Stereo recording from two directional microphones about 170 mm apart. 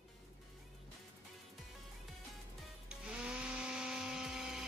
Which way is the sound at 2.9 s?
5° right (ahead or behind).